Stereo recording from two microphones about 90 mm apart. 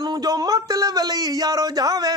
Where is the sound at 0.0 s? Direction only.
50° right (ahead or behind).